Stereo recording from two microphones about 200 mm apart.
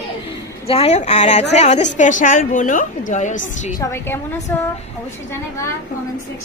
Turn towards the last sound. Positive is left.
turn(degrees=10)  # may be behind; listen again after turning